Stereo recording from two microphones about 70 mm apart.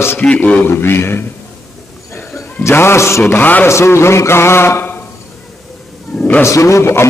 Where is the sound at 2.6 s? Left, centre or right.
Left.